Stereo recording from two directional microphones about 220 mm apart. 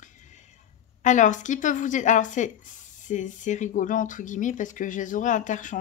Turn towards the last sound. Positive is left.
turn(degrees=35)  # may be behind; listen again after turning